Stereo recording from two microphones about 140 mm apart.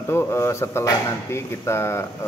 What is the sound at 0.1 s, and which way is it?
Speech, 20° left (ahead or behind).